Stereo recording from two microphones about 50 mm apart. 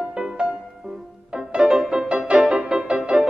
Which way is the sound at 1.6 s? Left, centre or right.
Centre.